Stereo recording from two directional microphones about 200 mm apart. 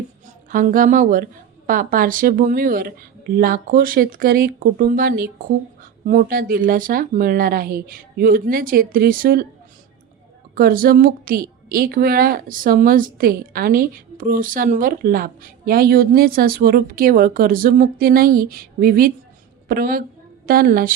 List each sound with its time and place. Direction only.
0.5 s a woman's voice: 40° right (ahead or behind)
10.5 s a woman's voice: 45° right (ahead or behind)